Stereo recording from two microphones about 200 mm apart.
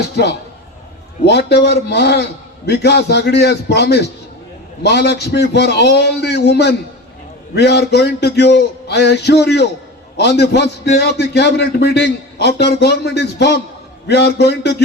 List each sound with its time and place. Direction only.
0.0 s a man's voice: 55° left (ahead or behind)